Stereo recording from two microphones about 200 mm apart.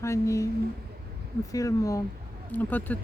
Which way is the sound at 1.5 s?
15° left (ahead or behind).